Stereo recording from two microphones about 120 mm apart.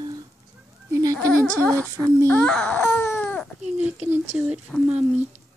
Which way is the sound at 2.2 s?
10° left (ahead or behind).